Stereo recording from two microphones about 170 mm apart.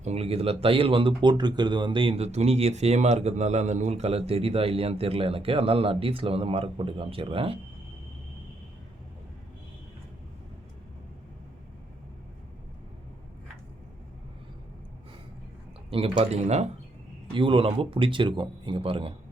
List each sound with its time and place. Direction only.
0.0 s speech: 40° right (ahead or behind)
15.9 s speech: 35° right (ahead or behind)